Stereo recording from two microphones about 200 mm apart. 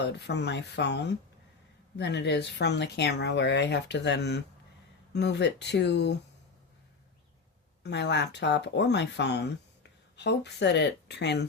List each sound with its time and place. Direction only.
0.0 s speech: 60° left (ahead or behind)
7.9 s speech: 60° left (ahead or behind)